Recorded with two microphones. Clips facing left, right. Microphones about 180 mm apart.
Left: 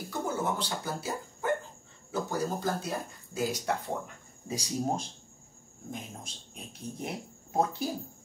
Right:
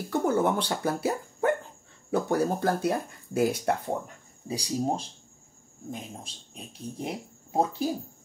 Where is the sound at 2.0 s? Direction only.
60° right (ahead or behind).